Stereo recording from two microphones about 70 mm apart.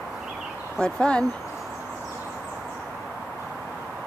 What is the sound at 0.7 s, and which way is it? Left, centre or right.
Speech, centre.